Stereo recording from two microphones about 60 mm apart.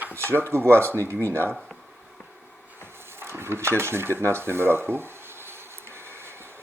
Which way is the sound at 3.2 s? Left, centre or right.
Right.